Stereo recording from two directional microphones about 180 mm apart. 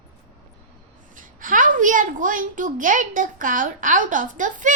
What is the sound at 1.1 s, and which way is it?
A woman's voice, 45° right (ahead or behind).